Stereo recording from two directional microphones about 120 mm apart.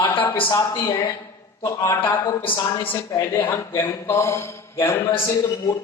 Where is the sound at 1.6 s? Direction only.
25° left (ahead or behind).